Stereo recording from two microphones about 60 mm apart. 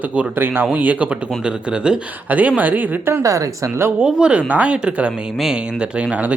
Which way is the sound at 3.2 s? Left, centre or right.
Right.